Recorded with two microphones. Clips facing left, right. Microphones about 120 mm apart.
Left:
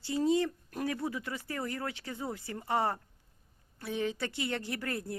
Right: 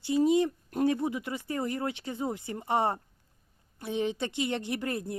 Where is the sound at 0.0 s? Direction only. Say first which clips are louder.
Right 4 dB; 15° right (ahead or behind).